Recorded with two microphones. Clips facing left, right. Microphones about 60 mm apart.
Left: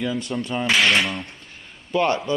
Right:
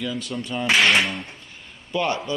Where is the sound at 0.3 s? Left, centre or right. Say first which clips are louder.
Left 3 dB; left.